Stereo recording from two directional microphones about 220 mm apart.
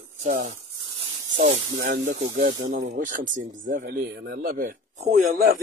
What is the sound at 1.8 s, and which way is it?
A man's voice, 35° right (ahead or behind).